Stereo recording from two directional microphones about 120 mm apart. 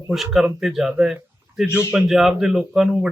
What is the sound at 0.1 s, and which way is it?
A man's voice, centre (ahead or behind).